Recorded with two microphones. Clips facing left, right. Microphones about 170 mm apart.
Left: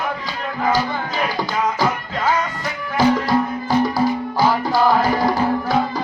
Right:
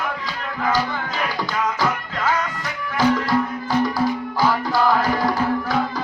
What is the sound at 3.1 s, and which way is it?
Music, 25° left (ahead or behind).